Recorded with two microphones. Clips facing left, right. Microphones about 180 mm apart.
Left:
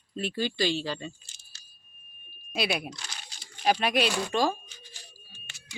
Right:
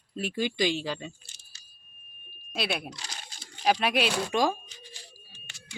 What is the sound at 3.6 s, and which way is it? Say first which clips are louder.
Speech: even; centre (ahead or behind).